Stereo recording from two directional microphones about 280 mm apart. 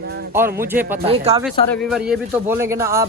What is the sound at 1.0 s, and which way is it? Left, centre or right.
Speech, right.